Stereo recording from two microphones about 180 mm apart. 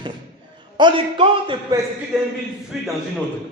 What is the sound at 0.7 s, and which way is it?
A man's voice, 25° right (ahead or behind).